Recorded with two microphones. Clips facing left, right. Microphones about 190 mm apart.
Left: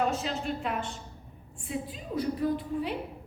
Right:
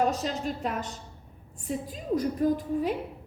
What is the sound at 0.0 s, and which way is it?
A woman's voice, 40° right (ahead or behind).